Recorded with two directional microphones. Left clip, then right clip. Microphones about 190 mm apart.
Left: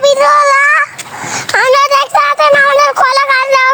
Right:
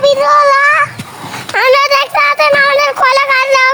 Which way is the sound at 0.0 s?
35° left (ahead or behind).